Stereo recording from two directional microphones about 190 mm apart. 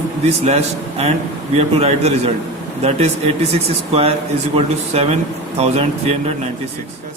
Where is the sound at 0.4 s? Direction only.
35° right (ahead or behind).